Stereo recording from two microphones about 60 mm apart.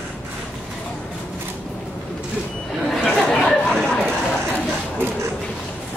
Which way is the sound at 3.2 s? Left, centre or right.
Centre.